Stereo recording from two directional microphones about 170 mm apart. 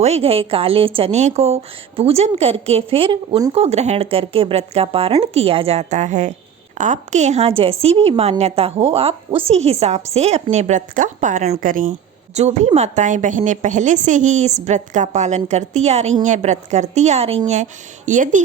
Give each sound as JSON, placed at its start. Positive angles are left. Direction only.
{"t": 0.0, "sound": "a woman's voice", "side_deg": -35}